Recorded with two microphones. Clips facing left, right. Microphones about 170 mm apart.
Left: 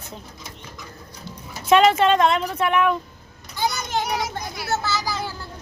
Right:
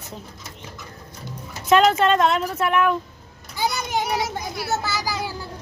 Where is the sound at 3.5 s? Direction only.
10° right (ahead or behind).